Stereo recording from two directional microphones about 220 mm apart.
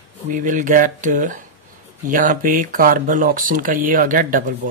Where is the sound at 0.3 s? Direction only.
35° right (ahead or behind).